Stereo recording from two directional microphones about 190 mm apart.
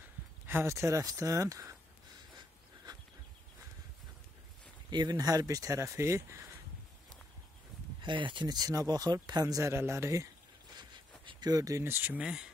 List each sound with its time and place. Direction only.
0.5 s speech: 15° right (ahead or behind)
4.9 s speech: 20° right (ahead or behind)
8.0 s speech: 25° right (ahead or behind); by 12.4 s 5° right (ahead or behind)